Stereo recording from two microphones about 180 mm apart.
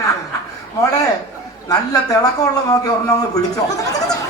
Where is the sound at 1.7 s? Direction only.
20° left (ahead or behind).